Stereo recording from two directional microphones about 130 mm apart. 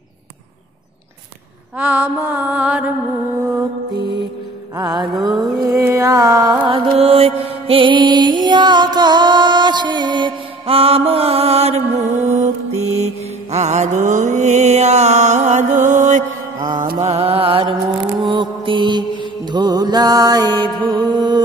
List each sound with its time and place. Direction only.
1.8 s mantra: 10° right (ahead or behind)
3.3 s mantra: 20° right (ahead or behind)
4.7 s music: 30° right (ahead or behind)
5.2 s mantra: 30° right (ahead or behind)
6.6 s music: 45° right (ahead or behind); by 16.3 s 65° right (ahead or behind)
16.5 s music: 30° right (ahead or behind)
17.0 s music: 55° right (ahead or behind); by 21.4 s 30° right (ahead or behind)